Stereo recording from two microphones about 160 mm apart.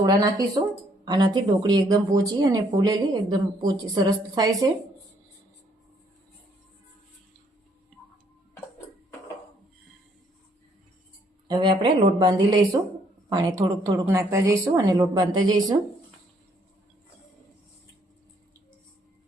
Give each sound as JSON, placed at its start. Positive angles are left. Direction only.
{"t": 0.0, "sound": "speech", "side_deg": -25}
{"t": 11.4, "sound": "speech", "side_deg": -30}